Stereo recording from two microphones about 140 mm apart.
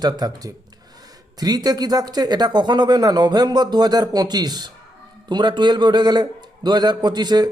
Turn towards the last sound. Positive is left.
turn(degrees=-30)  # may be behind; listen again after turning